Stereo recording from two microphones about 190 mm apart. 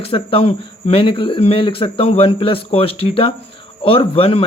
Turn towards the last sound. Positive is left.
turn(degrees=30)  # may be behind; listen again after turning